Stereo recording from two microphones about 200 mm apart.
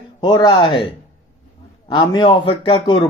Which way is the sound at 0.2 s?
20° left (ahead or behind).